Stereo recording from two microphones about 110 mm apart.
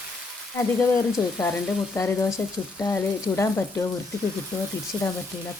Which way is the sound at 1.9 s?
30° left (ahead or behind).